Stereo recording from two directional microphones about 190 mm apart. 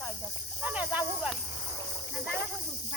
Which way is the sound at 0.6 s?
5° right (ahead or behind).